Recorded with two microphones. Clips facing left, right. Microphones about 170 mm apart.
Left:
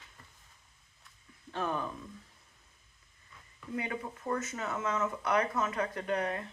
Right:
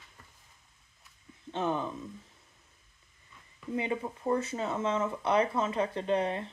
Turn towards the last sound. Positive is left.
turn(degrees=-25)  # may be behind; listen again after turning